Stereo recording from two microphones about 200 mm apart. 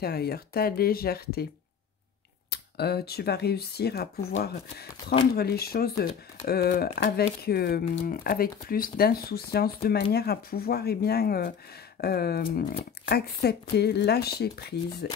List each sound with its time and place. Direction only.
0.0 s speech: 50° left (ahead or behind)
2.5 s speech: 55° left (ahead or behind)
5.3 s speech: 50° left (ahead or behind)